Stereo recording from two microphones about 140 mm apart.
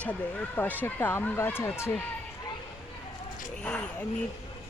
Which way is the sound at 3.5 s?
10° left (ahead or behind).